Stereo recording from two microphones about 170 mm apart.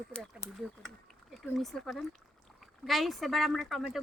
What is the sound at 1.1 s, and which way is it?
Speech, centre (ahead or behind).